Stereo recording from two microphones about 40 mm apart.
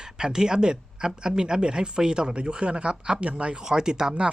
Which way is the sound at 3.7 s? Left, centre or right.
Centre.